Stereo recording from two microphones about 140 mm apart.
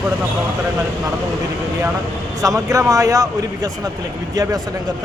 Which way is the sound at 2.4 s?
25° right (ahead or behind).